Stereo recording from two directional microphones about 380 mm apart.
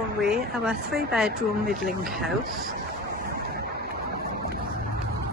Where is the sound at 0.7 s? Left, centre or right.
Right.